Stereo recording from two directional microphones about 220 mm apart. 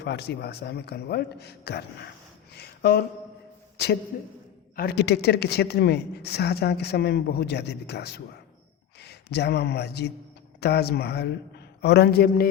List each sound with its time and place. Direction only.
0.0 s a woman's voice: 50° left (ahead or behind)
2.6 s a sound: 50° left (ahead or behind)
4.1 s a man's voice: 40° left (ahead or behind)